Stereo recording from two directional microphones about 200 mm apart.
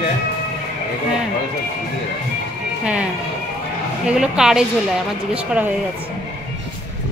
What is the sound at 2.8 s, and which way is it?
Music, 5° right (ahead or behind).